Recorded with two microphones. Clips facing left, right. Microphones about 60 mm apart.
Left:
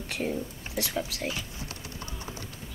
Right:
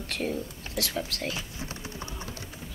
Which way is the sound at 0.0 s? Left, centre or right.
Centre.